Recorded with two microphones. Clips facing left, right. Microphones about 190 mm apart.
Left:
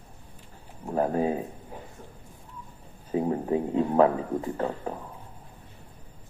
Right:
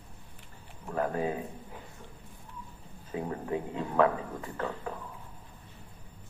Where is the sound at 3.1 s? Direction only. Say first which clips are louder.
Left 8 dB; 30° left (ahead or behind).